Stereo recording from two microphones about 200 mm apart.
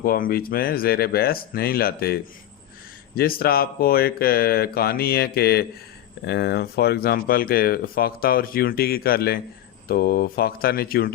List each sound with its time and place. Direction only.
0.0 s speech: 45° left (ahead or behind)
3.2 s speech: 50° left (ahead or behind)